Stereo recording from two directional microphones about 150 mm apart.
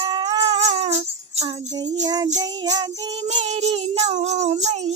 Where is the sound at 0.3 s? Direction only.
45° right (ahead or behind).